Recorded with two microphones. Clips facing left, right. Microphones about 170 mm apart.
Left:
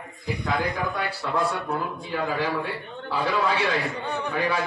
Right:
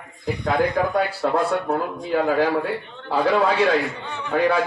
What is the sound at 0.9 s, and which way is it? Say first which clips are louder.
A man's voice: right 6 dB; 45° right (ahead or behind).